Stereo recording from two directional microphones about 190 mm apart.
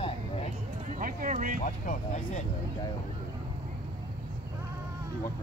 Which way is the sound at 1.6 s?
40° left (ahead or behind).